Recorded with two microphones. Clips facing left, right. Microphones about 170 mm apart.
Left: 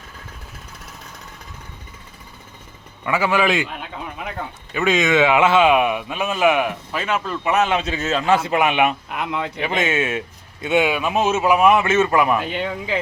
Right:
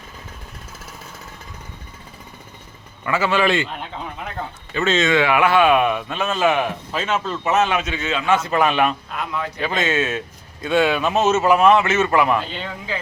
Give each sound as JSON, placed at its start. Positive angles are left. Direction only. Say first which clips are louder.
{"t": 3.1, "sound": "speech", "louder": "even", "side_deg": 15}
{"t": 4.7, "sound": "speech", "louder": "even", "side_deg": 15}
{"t": 7.8, "sound": "a man's voice", "louder": "left 2 dB", "side_deg": 35}
{"t": 8.4, "sound": "speech", "louder": "even", "side_deg": 20}
{"t": 11.8, "sound": "a man's voice", "louder": "left 1 dB", "side_deg": 25}
{"t": 12.3, "sound": "speech", "louder": "left 1 dB", "side_deg": 10}